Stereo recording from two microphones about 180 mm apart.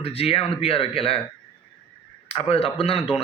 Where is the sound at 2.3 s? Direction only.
30° left (ahead or behind).